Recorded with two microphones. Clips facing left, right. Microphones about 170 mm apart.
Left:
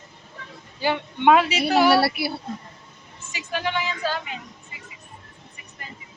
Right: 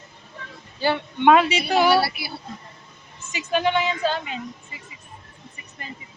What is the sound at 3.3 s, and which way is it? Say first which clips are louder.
Speech: right 5 dB; 20° right (ahead or behind).